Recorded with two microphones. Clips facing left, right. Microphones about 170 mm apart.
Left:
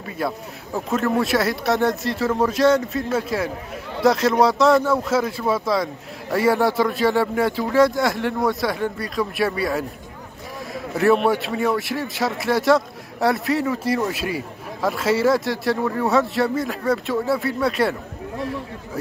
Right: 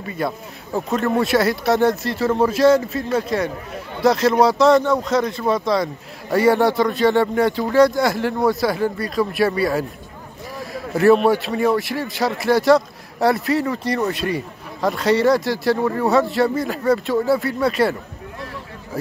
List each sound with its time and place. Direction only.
0.2 s speech: 5° left (ahead or behind)
10.7 s a sound: centre (ahead or behind)
11.2 s speech: centre (ahead or behind)